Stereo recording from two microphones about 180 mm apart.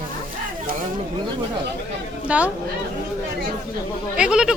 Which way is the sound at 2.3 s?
5° right (ahead or behind).